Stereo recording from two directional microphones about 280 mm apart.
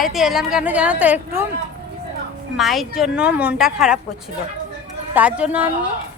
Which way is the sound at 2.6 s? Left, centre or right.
Centre.